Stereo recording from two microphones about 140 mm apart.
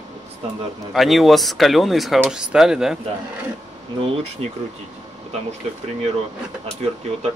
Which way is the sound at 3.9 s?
40° right (ahead or behind).